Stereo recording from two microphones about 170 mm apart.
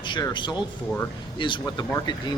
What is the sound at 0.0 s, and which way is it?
Speech, 25° left (ahead or behind).